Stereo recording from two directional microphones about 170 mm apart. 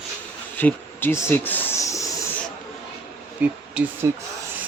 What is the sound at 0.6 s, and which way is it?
Speech, 10° left (ahead or behind).